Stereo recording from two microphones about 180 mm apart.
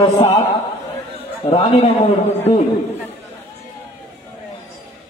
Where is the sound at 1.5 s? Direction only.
35° left (ahead or behind).